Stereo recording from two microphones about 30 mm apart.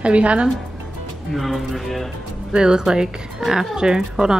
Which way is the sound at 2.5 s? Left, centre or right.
Right.